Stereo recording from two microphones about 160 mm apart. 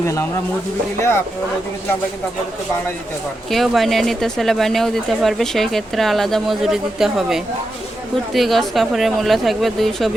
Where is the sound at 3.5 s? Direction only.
Centre (ahead or behind).